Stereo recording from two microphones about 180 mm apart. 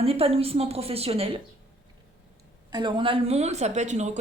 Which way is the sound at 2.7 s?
25° right (ahead or behind).